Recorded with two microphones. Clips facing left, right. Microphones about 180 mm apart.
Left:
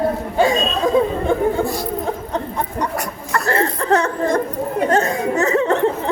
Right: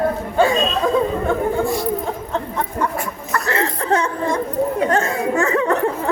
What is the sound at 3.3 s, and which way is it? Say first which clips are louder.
Chuckle: left 2 dB; 45° left (ahead or behind).